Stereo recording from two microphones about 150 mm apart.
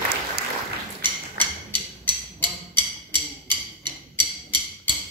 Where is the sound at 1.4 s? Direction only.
30° right (ahead or behind).